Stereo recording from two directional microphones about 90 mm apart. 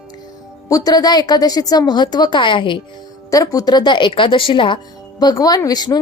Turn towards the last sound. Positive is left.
turn(degrees=45)  # may be behind; listen again after turning